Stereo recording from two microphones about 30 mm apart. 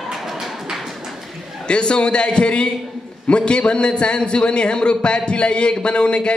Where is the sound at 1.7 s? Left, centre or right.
Left.